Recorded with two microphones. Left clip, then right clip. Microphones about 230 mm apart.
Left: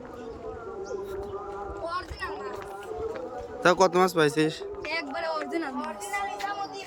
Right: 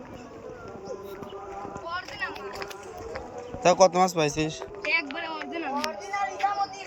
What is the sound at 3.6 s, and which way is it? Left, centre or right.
Speech, centre.